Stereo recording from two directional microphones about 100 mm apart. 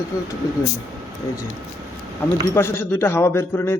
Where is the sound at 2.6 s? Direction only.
25° left (ahead or behind).